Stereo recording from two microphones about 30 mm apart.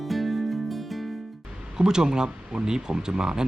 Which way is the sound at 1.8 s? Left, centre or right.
Right.